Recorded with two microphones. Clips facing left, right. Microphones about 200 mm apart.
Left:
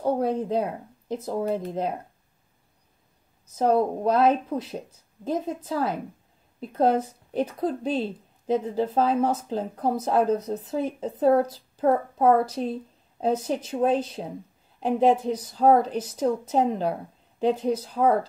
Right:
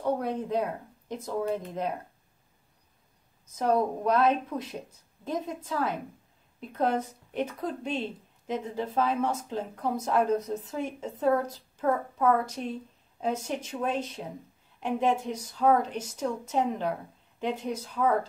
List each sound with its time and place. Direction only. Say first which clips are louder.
0.0 s speech: left 5 dB; 30° left (ahead or behind)
3.5 s speech: left 4 dB; 30° left (ahead or behind)